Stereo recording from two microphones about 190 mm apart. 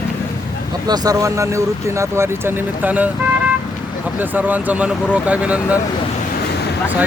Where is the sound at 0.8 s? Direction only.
20° right (ahead or behind).